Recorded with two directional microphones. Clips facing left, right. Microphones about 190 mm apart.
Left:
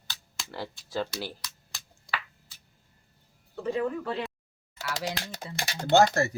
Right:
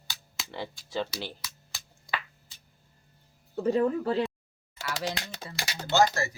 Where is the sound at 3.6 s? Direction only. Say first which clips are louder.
Right 4 dB; 40° right (ahead or behind).